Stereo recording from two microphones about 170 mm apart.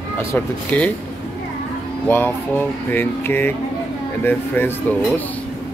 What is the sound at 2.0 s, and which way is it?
Speech, 10° left (ahead or behind).